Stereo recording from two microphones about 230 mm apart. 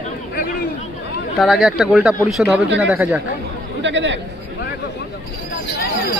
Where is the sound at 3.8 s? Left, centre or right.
Right.